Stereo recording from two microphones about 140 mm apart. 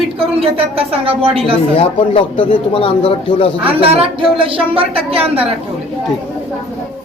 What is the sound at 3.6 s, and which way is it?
Speech, 40° right (ahead or behind).